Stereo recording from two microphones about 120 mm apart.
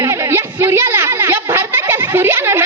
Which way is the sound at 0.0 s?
20° right (ahead or behind).